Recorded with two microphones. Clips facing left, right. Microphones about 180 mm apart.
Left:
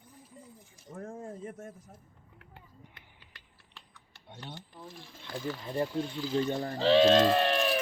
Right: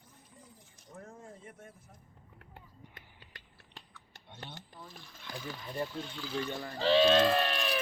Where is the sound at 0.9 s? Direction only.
50° left (ahead or behind).